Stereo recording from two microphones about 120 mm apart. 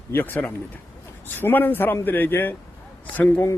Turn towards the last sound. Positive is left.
turn(degrees=15)  # may be behind; listen again after turning